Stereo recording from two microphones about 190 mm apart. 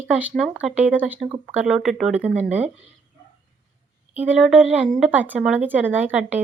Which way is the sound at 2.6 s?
35° right (ahead or behind).